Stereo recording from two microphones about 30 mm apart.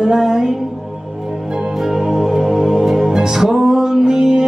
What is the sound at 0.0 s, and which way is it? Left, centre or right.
Music, centre.